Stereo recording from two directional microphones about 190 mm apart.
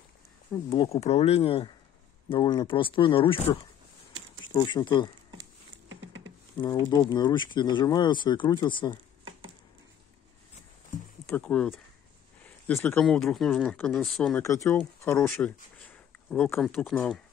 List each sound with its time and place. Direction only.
0.5 s speech: 15° left (ahead or behind)
0.9 s speech: 35° left (ahead or behind)
4.6 s speech: 25° left (ahead or behind)
5.9 s a sound: 85° right
6.5 s speech: 20° left (ahead or behind)
11.2 s speech: 10° left (ahead or behind)
14.4 s speech: 15° left (ahead or behind)
15.3 s a sound: 10° left (ahead or behind)
16.5 s speech: centre (ahead or behind)